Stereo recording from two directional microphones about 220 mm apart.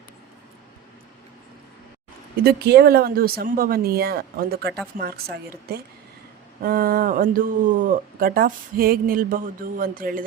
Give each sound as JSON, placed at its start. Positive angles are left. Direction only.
{"t": 2.3, "sound": "speech", "side_deg": -45}